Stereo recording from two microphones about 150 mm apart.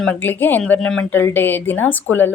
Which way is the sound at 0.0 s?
10° left (ahead or behind).